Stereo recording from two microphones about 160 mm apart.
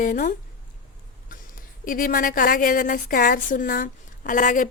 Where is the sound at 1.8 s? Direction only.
60° left (ahead or behind).